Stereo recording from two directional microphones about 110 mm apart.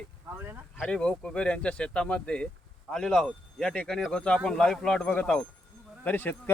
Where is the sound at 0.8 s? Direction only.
10° left (ahead or behind).